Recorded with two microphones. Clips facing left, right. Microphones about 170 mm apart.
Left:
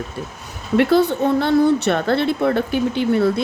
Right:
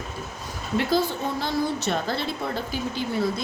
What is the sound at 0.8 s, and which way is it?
A woman's voice, 65° left (ahead or behind).